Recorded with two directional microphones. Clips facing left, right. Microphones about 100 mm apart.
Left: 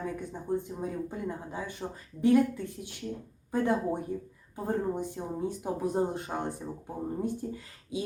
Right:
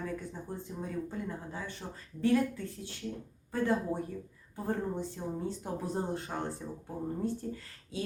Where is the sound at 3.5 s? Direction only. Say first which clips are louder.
Left 3 dB; 20° left (ahead or behind).